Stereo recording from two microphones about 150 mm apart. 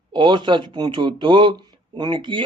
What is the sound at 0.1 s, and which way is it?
Speech, 30° right (ahead or behind).